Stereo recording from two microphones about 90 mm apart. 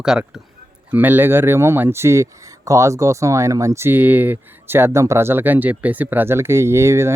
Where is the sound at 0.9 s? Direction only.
20° right (ahead or behind).